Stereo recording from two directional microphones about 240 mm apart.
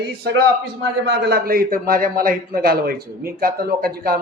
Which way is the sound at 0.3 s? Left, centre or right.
Right.